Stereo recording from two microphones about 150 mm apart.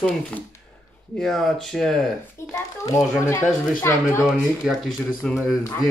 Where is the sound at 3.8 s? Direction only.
20° left (ahead or behind).